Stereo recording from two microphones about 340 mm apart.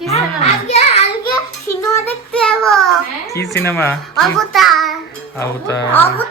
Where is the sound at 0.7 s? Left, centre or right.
Centre.